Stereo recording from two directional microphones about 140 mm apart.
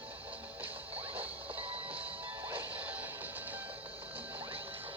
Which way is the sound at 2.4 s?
15° right (ahead or behind).